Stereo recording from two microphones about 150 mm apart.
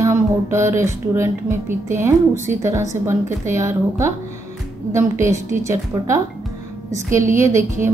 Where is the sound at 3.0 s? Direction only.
20° right (ahead or behind).